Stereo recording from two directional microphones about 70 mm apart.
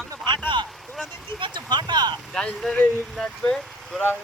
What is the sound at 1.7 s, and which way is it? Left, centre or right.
Speech, right.